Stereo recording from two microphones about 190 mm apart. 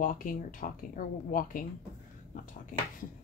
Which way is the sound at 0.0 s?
45° left (ahead or behind).